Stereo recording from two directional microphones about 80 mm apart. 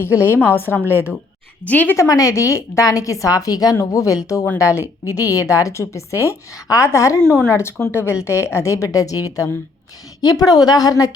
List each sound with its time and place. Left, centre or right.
0.1 s a woman's voice: right
1.6 s a woman's voice: centre
2.0 s a woman's voice: left